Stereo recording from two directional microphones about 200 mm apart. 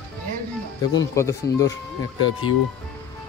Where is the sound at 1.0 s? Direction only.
15° left (ahead or behind).